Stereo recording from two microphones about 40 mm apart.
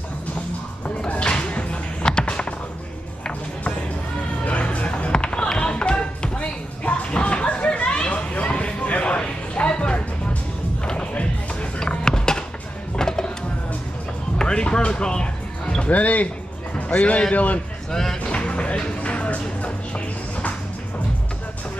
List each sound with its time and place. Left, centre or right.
0.8 s music: left
4.5 s a sound: left
5.1 s music: left
5.6 s a sound: left
10.8 s music: left
14.4 s music: left
15.9 s music: left
16.7 s a sound: left
17.9 s music: centre
18.2 s music: left